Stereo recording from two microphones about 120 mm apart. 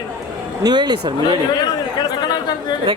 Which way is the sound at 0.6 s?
35° right (ahead or behind).